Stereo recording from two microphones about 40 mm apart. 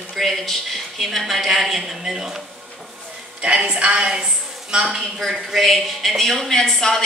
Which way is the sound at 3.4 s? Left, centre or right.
Right.